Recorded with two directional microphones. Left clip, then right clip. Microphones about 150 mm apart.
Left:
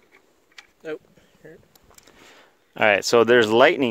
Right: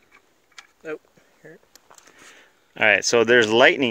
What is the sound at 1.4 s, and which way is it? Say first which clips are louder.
Speech: even; 75° left (ahead or behind).